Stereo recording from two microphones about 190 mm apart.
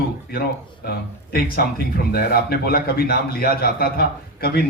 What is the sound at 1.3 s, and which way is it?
A man's voice, 55° left (ahead or behind).